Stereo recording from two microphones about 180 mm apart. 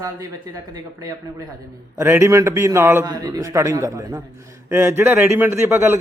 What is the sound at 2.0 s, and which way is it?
A man's voice, 15° right (ahead or behind).